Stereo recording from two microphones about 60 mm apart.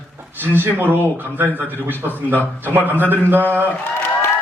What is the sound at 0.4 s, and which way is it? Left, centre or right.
Speech, right.